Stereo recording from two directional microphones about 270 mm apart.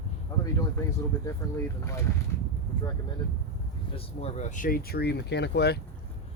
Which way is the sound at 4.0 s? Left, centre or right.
Left.